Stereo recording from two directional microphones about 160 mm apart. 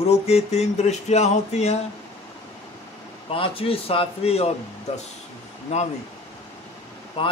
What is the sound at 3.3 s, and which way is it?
Speech, 35° left (ahead or behind).